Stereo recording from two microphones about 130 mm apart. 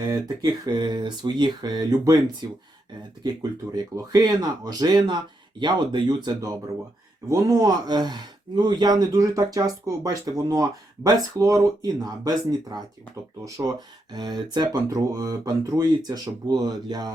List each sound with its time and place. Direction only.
0.6 s speech: 35° right (ahead or behind)
3.9 s speech: 30° right (ahead or behind)